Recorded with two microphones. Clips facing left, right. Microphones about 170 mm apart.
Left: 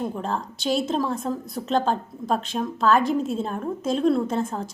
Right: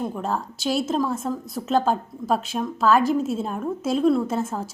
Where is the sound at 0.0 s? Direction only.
5° right (ahead or behind).